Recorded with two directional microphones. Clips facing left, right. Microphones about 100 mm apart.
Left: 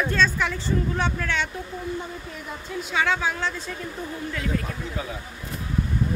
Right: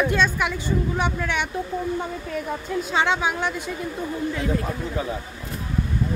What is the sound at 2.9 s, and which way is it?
Speech, 20° right (ahead or behind).